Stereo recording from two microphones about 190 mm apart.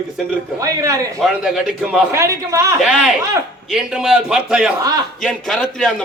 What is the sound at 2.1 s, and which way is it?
Speech, 15° right (ahead or behind).